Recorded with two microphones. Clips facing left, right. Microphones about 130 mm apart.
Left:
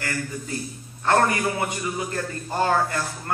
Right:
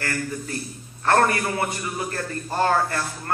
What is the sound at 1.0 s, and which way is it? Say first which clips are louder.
A man's voice: right 1 dB; 15° left (ahead or behind).